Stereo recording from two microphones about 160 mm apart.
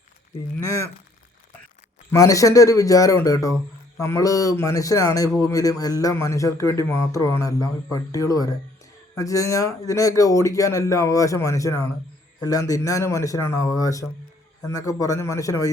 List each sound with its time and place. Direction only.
2.1 s speech: 20° left (ahead or behind)